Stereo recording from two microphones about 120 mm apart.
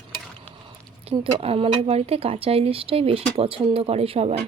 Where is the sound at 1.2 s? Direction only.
50° right (ahead or behind).